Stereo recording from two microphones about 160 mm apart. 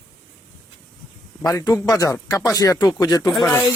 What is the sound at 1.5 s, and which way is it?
Speech, 20° left (ahead or behind).